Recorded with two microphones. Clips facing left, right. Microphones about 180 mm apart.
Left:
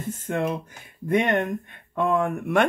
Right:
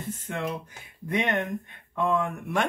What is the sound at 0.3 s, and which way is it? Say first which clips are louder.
Speech: left 7 dB; 50° left (ahead or behind).